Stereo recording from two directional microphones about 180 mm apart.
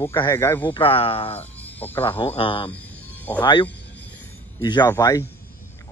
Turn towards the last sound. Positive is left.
turn(degrees=15)  # may be behind; listen again after turning